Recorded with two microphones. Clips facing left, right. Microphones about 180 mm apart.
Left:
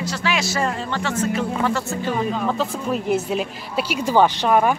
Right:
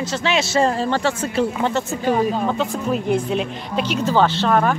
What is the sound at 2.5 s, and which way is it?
Speech, centre (ahead or behind).